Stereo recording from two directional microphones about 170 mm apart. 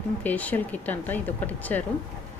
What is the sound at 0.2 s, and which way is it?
Speech, 10° left (ahead or behind).